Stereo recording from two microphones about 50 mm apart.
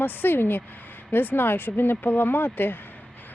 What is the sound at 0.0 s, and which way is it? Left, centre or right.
Speech, left.